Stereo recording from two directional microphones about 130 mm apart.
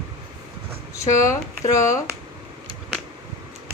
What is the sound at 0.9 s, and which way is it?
A woman's voice, 25° left (ahead or behind).